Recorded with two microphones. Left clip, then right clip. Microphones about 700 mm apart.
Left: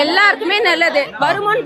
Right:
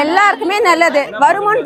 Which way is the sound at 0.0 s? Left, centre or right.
Centre.